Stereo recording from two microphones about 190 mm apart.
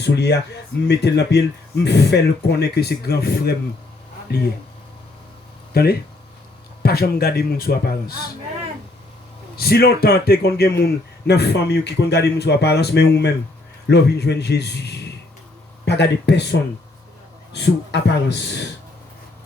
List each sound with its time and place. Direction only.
0.0 s a man's voice: 60° left (ahead or behind)
5.7 s a man's voice: 55° left (ahead or behind)
9.6 s a man's voice: 55° left (ahead or behind)